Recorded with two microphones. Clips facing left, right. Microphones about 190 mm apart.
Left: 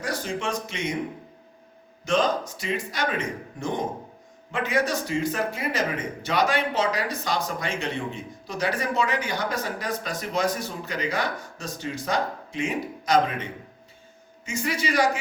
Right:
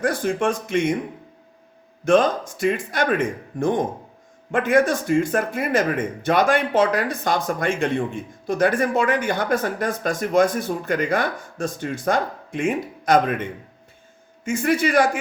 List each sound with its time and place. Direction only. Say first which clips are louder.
0.0 s speech: right 8 dB; 55° right (ahead or behind)
2.0 s speech: right 6 dB; 55° right (ahead or behind)